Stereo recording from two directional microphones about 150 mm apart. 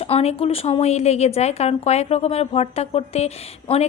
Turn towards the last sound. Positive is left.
turn(degrees=45)  # may be behind; listen again after turning